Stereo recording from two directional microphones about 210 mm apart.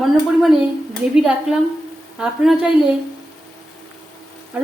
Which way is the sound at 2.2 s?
Centre (ahead or behind).